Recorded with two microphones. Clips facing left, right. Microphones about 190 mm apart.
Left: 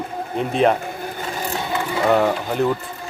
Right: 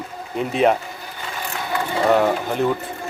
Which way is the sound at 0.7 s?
50° left (ahead or behind).